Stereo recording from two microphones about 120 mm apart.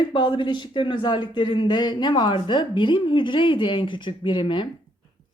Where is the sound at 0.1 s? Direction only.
40° left (ahead or behind).